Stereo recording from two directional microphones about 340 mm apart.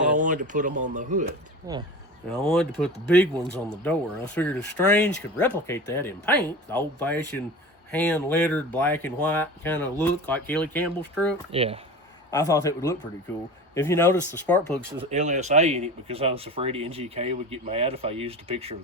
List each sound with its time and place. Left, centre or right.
0.0 s a sound: right
0.8 s speech: right
1.7 s speech: centre
2.5 s speech: centre
11.5 s speech: centre
12.3 s speech: centre
15.1 s speech: right